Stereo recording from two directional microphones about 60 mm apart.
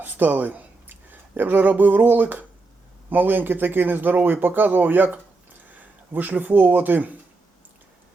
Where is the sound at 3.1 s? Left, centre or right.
Right.